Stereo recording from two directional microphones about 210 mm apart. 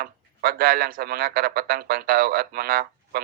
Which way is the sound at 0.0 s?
45° right (ahead or behind).